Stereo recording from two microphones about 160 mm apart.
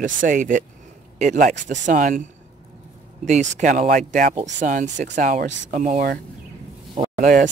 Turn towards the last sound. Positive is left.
turn(degrees=-55)  # may be behind; listen again after turning